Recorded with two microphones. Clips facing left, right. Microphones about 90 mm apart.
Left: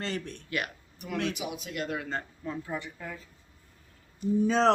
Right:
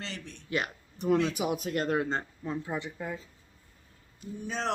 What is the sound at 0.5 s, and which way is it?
Speech, 25° right (ahead or behind).